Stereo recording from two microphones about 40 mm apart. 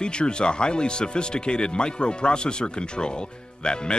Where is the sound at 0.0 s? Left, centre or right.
Left.